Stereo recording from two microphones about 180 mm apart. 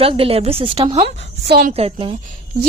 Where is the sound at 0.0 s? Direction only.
30° right (ahead or behind).